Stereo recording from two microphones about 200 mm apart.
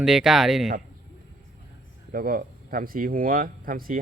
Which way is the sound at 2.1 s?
45° right (ahead or behind).